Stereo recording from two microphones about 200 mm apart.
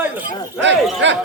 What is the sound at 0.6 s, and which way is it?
Speech, 65° right (ahead or behind).